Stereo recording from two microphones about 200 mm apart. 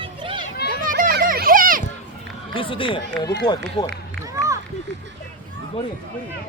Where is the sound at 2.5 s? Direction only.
25° left (ahead or behind).